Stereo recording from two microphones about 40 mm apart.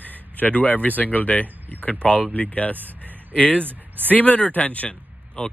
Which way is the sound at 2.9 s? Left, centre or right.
Right.